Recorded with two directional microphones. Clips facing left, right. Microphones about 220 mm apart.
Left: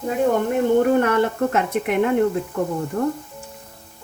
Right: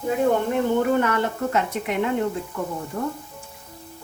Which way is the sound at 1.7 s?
60° left (ahead or behind).